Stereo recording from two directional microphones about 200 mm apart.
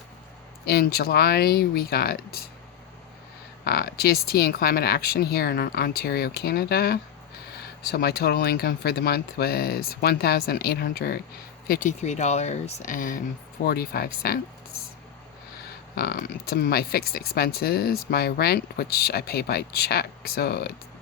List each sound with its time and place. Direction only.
0.6 s speech: 50° left (ahead or behind)
3.6 s speech: 50° left (ahead or behind)
16.0 s speech: 50° left (ahead or behind)